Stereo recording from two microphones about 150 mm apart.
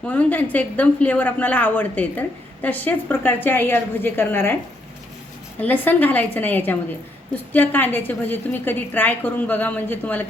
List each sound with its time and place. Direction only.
0.0 s a woman's voice: 10° left (ahead or behind)
5.5 s a woman's voice: 10° left (ahead or behind)